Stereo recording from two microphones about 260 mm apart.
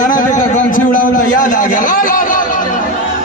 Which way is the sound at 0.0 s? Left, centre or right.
Left.